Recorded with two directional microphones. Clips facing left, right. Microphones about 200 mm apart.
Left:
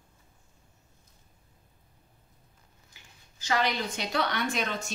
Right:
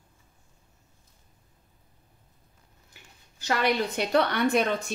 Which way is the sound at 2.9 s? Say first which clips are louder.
Right 4 dB; 60° right (ahead or behind).